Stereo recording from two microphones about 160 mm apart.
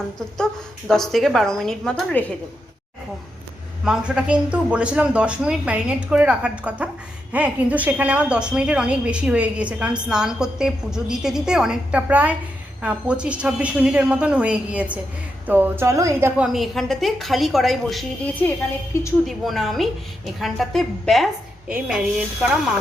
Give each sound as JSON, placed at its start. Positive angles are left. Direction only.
{"t": 0.9, "sound": "a woman's voice", "side_deg": 0}
{"t": 3.8, "sound": "a woman's voice", "side_deg": -5}
{"t": 16.4, "sound": "a woman's voice", "side_deg": 0}
{"t": 19.2, "sound": "a woman's voice", "side_deg": 0}